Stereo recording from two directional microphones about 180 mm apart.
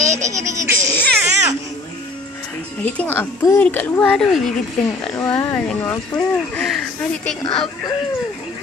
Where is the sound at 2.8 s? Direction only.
10° left (ahead or behind).